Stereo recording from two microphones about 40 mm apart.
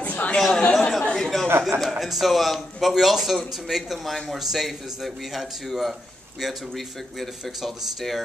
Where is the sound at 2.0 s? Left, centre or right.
Centre.